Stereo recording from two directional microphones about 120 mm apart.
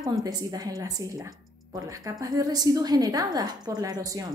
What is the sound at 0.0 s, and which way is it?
A woman's voice, 30° right (ahead or behind).